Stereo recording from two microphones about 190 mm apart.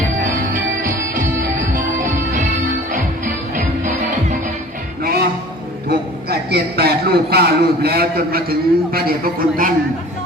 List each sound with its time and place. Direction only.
0.3 s music: 45° right (ahead or behind)
3.5 s music: 40° right (ahead or behind)
5.0 s music: 55° right (ahead or behind)
5.9 s a man's voice: 55° right (ahead or behind)